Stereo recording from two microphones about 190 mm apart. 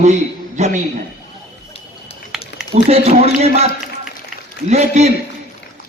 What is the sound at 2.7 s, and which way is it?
Speech, 35° right (ahead or behind).